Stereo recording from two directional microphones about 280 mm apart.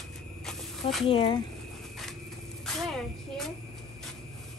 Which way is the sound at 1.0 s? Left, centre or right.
Centre.